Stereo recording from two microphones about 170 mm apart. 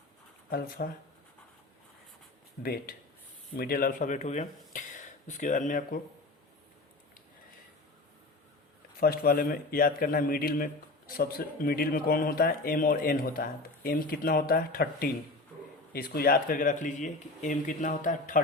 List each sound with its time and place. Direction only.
0.8 s a man's voice: 65° left (ahead or behind)
3.5 s speech: 60° left (ahead or behind)
9.0 s a man's voice: 60° left (ahead or behind)